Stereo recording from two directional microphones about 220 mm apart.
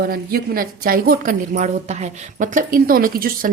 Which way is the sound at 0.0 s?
40° right (ahead or behind).